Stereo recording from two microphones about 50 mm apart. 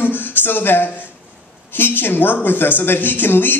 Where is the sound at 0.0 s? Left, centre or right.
Left.